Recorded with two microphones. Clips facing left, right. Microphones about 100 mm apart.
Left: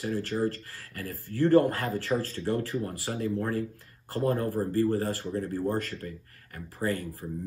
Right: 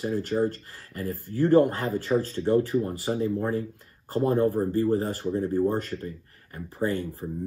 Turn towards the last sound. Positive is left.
turn(degrees=-25)  # may be behind; listen again after turning